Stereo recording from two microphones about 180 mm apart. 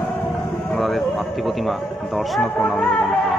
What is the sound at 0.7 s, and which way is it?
Speech, centre (ahead or behind).